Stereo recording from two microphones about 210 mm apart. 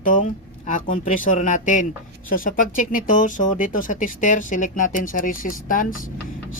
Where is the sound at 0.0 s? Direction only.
40° left (ahead or behind).